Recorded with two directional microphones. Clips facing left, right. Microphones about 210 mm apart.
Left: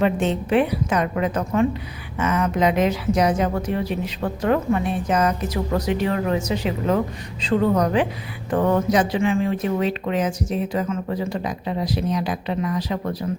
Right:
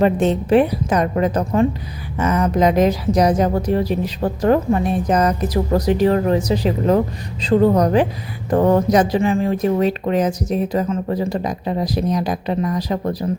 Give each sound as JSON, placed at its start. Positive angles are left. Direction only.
{"t": 0.0, "sound": "speech", "side_deg": -40}